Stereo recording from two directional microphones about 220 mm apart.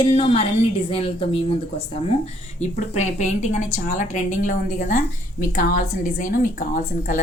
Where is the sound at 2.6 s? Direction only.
30° left (ahead or behind).